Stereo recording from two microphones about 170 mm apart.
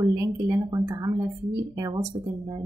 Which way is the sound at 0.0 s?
20° right (ahead or behind).